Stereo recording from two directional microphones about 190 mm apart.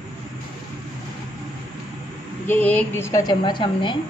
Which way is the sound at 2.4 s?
10° left (ahead or behind).